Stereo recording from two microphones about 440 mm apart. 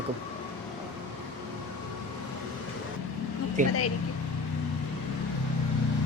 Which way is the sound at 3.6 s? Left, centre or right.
Centre.